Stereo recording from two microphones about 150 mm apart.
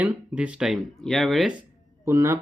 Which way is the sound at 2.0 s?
20° right (ahead or behind).